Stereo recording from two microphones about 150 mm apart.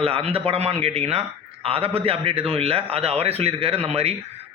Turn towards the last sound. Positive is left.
turn(degrees=-45)  # may be behind; listen again after turning